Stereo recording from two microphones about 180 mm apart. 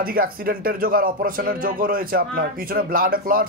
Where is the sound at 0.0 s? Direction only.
55° right (ahead or behind).